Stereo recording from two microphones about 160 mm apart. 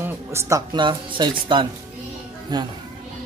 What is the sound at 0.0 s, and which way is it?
Speech, 15° right (ahead or behind).